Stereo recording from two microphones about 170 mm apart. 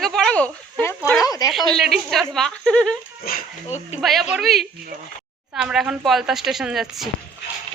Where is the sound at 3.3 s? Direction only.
60° left (ahead or behind).